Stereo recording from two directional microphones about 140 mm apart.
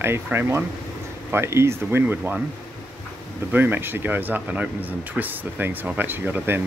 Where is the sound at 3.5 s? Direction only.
15° right (ahead or behind).